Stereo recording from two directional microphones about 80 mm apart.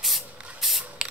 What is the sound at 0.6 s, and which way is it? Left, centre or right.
Spray, centre.